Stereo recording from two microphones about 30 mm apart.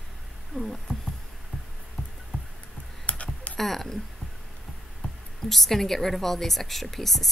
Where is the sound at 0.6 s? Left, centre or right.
Centre.